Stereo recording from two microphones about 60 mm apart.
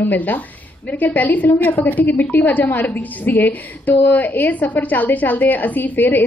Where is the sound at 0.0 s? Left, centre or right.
Left.